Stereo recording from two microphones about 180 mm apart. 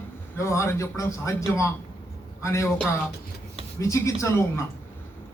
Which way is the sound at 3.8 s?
15° left (ahead or behind).